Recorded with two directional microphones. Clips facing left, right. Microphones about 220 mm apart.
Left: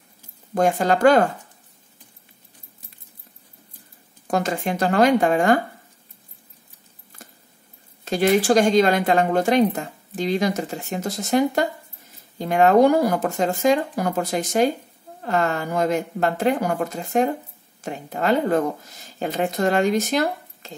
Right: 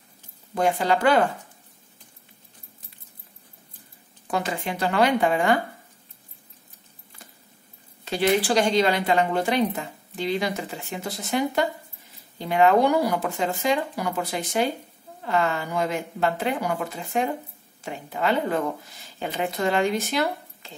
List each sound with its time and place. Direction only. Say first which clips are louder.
0.6 s speech: left 4 dB; 45° left (ahead or behind)
4.3 s speech: left 5 dB; 45° left (ahead or behind)
8.0 s speech: left 3 dB; 45° left (ahead or behind)